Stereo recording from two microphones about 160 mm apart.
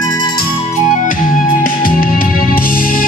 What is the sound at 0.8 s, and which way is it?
Music, 55° left (ahead or behind).